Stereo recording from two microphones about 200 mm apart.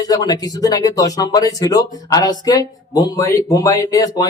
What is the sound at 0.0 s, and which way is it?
Speech, 20° left (ahead or behind).